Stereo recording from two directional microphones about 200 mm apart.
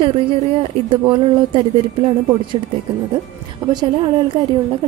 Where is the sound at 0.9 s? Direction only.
25° right (ahead or behind).